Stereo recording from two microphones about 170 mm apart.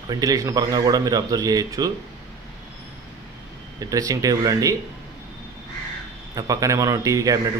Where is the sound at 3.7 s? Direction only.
20° right (ahead or behind).